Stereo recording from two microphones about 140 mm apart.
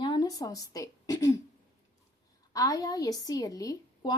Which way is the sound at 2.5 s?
25° left (ahead or behind).